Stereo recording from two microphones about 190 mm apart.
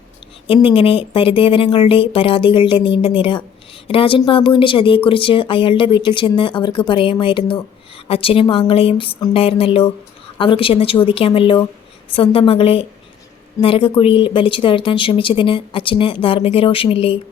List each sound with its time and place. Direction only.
0.4 s speech: 30° left (ahead or behind)